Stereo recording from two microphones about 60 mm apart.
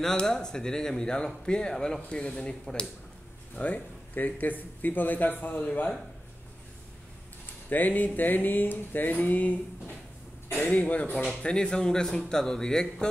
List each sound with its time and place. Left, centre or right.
0.0 s speech: centre; by 5.6 s left
7.7 s a sound: left
10.5 s a man's voice: left
11.4 s speech: centre